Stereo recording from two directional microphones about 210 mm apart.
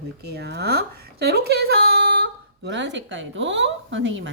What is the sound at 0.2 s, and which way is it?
Speech, 50° right (ahead or behind).